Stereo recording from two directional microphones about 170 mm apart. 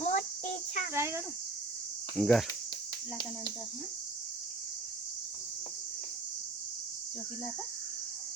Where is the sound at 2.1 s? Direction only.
Centre (ahead or behind).